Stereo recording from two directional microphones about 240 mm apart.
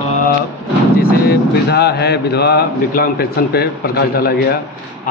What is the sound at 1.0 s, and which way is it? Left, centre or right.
Speech, left.